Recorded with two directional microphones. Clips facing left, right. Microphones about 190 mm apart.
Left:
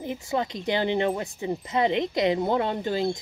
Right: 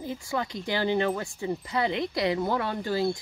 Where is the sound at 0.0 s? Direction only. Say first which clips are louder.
Left 3 dB; 20° left (ahead or behind).